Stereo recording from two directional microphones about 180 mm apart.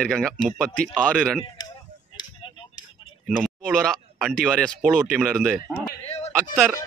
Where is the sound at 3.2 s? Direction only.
5° left (ahead or behind).